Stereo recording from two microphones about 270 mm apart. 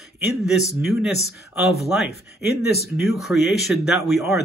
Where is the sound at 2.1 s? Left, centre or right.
Left.